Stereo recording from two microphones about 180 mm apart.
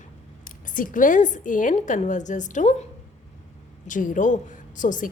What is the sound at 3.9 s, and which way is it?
A woman's voice, 45° left (ahead or behind).